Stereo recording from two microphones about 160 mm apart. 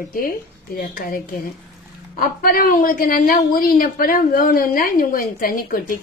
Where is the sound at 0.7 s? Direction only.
65° left (ahead or behind).